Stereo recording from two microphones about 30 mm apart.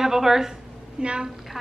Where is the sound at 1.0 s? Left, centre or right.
Right.